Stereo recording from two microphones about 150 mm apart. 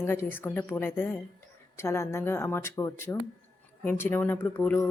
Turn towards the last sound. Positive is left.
turn(degrees=15)  # may be behind; listen again after turning